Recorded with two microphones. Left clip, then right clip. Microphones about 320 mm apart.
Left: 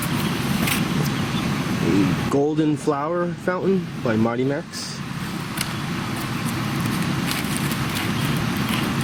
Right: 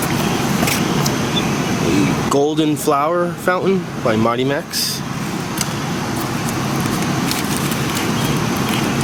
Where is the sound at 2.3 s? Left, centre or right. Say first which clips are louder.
Right 4 dB; centre.